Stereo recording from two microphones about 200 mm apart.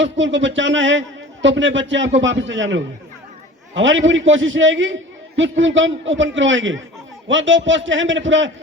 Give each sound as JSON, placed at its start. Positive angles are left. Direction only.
{"t": 0.0, "sound": "a man's voice", "side_deg": -65}